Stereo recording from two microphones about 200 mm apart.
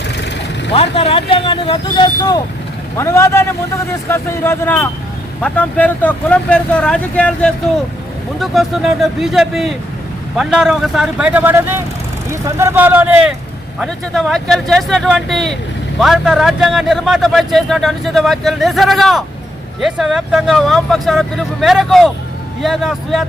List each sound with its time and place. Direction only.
0.7 s a man's voice: 30° left (ahead or behind); by 13.3 s 10° right (ahead or behind)
13.7 s a man's voice: 5° left (ahead or behind)